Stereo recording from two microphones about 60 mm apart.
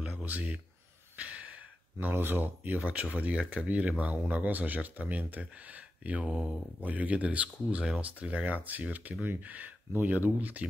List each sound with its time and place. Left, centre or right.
0.2 s speech: right
2.0 s speech: right